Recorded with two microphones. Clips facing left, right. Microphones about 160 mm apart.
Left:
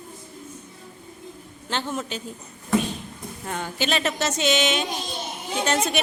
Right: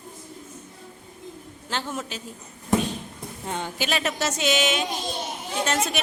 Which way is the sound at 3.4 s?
20° right (ahead or behind).